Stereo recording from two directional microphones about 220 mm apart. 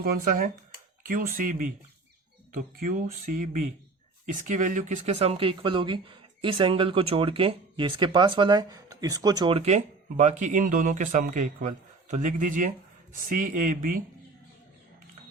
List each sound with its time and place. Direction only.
0.0 s speech: 40° right (ahead or behind)